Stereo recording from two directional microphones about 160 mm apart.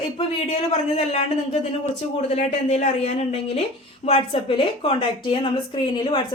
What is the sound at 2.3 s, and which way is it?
A woman's voice, 45° left (ahead or behind).